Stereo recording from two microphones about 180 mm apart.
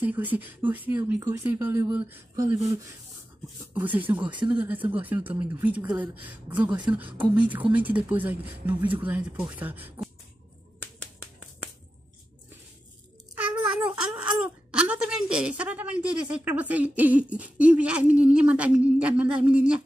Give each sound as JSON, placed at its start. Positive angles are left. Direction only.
{"t": 0.0, "sound": "speech", "side_deg": -10}
{"t": 4.2, "sound": "speech", "side_deg": -25}
{"t": 5.0, "sound": "speech", "side_deg": -10}
{"t": 13.4, "sound": "a sound", "side_deg": -10}
{"t": 14.7, "sound": "a woman's voice", "side_deg": -5}